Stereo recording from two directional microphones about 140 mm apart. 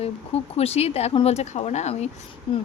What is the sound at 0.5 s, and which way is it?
A woman's voice, 45° left (ahead or behind).